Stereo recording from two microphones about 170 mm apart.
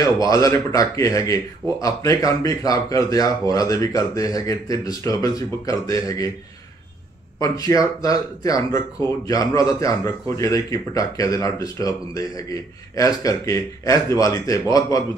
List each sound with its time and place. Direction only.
0.2 s a man's voice: 20° left (ahead or behind)
7.3 s a man's voice: 20° left (ahead or behind)